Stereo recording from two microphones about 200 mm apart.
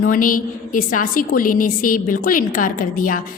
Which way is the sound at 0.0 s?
45° left (ahead or behind).